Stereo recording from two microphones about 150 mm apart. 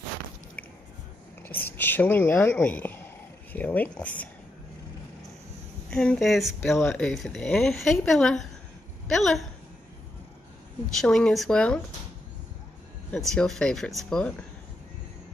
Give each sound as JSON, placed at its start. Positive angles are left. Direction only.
{"t": 1.5, "sound": "speech", "side_deg": 15}
{"t": 5.9, "sound": "a woman's voice", "side_deg": 5}
{"t": 11.0, "sound": "a woman's voice", "side_deg": 5}
{"t": 13.1, "sound": "a woman's voice", "side_deg": 5}